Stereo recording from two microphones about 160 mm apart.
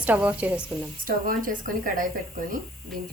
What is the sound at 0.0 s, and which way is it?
Speech, 10° right (ahead or behind).